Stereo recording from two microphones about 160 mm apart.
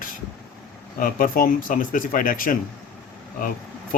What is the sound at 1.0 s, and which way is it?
Speech, 60° left (ahead or behind).